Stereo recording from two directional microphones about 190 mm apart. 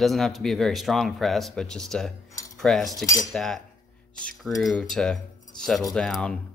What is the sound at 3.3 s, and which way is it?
Speech, centre (ahead or behind).